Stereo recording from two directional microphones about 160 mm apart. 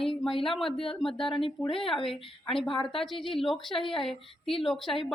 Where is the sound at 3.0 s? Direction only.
Centre (ahead or behind).